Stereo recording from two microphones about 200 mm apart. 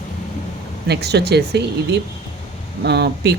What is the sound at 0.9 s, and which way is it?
Speech, 55° right (ahead or behind).